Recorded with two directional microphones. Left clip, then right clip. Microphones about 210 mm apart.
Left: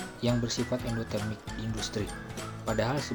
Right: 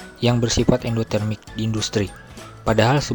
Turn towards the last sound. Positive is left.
turn(degrees=-45)  # may be behind; listen again after turning